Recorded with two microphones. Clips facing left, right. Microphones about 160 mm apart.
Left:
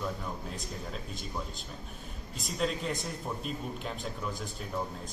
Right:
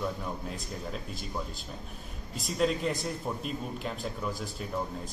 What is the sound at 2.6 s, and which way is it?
A man's voice, centre (ahead or behind).